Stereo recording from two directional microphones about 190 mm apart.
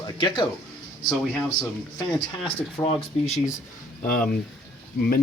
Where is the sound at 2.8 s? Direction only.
15° left (ahead or behind).